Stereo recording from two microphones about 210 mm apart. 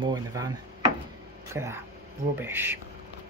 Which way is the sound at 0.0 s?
20° right (ahead or behind).